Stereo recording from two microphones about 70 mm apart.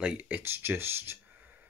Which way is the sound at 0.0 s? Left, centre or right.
Centre.